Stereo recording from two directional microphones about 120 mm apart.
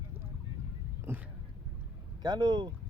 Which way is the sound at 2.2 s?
35° right (ahead or behind).